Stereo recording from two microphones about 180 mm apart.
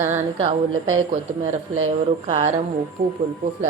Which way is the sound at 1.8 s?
35° right (ahead or behind).